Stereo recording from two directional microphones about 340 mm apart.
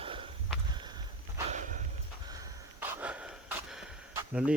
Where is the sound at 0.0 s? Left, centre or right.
Centre.